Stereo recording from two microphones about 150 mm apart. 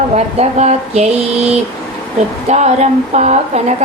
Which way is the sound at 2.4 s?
50° right (ahead or behind).